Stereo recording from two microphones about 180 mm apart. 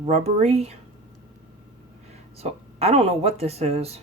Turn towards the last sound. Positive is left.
turn(degrees=-35)  # may be behind; listen again after turning